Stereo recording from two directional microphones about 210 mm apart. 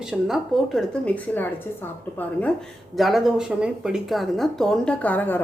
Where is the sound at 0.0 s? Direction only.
Centre (ahead or behind).